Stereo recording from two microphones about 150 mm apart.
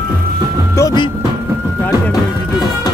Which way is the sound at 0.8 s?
20° left (ahead or behind).